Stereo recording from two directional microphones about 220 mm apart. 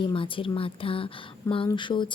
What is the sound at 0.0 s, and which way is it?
Speech, 25° left (ahead or behind).